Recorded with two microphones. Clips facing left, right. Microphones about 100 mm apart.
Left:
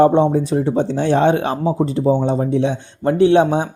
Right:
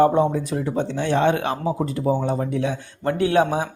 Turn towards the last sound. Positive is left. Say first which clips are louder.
# left 6 dB
turn(degrees=25)  # may be behind; listen again after turning